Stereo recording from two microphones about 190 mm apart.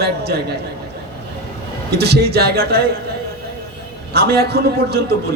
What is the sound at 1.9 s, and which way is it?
Speech, 55° right (ahead or behind).